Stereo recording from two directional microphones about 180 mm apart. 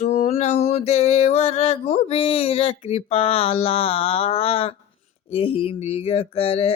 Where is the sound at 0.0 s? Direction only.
35° left (ahead or behind).